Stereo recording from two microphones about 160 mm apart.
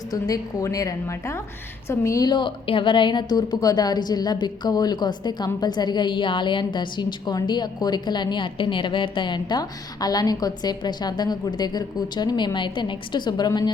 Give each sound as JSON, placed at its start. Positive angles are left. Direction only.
{"t": 0.1, "sound": "a woman's voice", "side_deg": 20}